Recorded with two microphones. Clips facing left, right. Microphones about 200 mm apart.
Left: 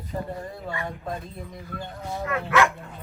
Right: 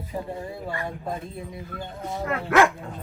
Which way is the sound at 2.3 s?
50° right (ahead or behind).